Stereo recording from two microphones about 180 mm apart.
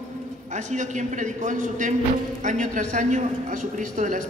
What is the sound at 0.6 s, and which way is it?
A woman's voice, 40° right (ahead or behind).